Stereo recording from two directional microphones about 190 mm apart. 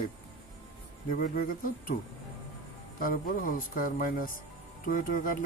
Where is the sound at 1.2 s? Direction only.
50° left (ahead or behind).